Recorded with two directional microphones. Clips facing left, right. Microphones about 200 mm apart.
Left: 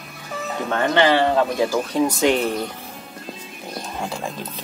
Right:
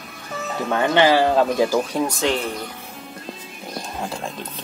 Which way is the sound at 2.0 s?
15° left (ahead or behind).